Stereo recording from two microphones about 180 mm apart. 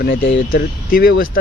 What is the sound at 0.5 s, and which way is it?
Speech, 55° left (ahead or behind).